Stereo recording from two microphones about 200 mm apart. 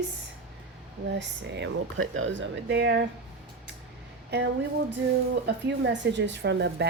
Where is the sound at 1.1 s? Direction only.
60° right (ahead or behind).